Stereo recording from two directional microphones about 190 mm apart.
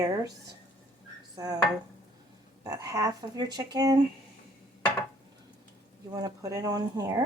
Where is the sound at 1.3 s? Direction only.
20° right (ahead or behind).